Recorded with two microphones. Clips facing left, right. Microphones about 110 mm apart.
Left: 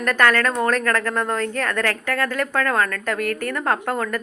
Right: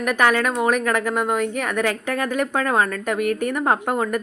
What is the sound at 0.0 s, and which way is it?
Speech, 15° right (ahead or behind).